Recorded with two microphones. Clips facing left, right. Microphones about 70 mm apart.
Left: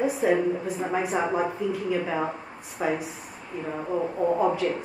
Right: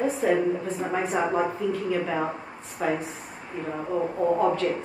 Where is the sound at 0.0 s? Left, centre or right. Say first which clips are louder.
Even; centre.